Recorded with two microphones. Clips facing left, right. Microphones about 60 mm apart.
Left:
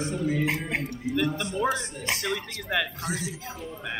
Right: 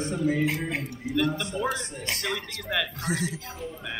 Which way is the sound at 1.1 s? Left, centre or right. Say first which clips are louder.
Right 1 dB; centre.